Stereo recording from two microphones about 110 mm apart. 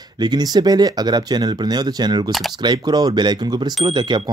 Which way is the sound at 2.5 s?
40° right (ahead or behind).